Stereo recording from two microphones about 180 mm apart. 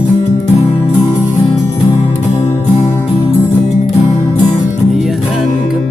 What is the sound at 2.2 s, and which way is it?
Music, 40° left (ahead or behind).